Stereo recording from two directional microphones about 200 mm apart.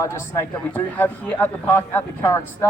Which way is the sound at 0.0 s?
15° left (ahead or behind).